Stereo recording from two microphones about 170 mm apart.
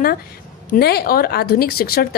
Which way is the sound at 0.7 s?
70° left (ahead or behind).